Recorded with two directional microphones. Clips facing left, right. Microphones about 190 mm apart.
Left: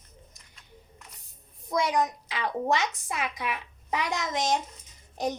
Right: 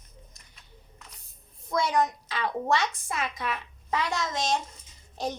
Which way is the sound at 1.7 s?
15° left (ahead or behind).